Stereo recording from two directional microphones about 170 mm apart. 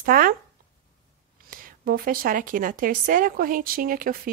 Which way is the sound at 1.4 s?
60° right (ahead or behind).